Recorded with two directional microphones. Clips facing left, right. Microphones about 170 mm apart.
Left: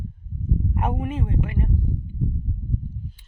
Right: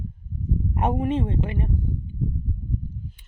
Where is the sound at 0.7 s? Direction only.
30° right (ahead or behind).